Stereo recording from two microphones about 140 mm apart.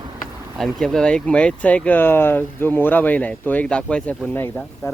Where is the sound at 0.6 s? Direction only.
Centre (ahead or behind).